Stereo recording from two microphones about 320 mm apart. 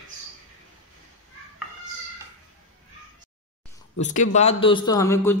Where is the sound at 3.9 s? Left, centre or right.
Left.